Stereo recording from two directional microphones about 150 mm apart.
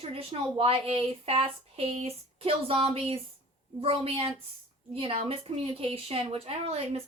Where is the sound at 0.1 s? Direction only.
40° right (ahead or behind).